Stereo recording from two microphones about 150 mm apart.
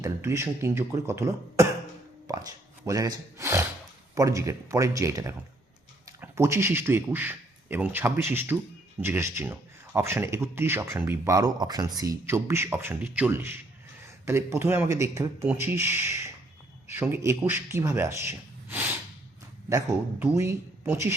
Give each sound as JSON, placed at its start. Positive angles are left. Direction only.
{"t": 0.0, "sound": "speech", "side_deg": -20}